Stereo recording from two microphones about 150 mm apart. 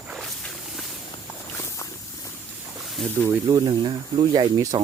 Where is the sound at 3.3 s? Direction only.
25° right (ahead or behind).